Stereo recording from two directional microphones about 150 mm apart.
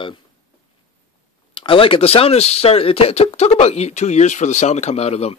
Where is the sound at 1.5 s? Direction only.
35° left (ahead or behind).